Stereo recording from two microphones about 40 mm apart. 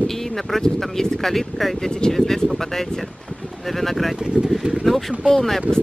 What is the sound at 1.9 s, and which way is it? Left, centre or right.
Speech, centre.